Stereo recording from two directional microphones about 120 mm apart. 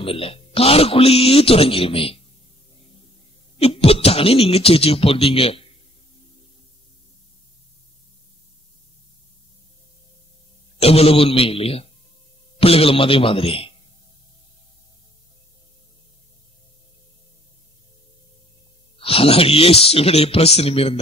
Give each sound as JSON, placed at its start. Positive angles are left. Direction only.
{"t": 0.0, "sound": "a man's voice", "side_deg": 50}
{"t": 3.5, "sound": "a man's voice", "side_deg": 55}
{"t": 10.8, "sound": "a man's voice", "side_deg": 55}
{"t": 18.9, "sound": "a man's voice", "side_deg": 50}